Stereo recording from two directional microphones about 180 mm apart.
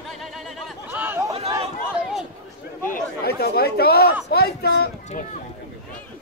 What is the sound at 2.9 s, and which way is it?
Chatter, 60° left (ahead or behind).